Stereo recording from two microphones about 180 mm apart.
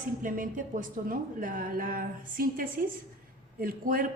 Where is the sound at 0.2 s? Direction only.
50° right (ahead or behind).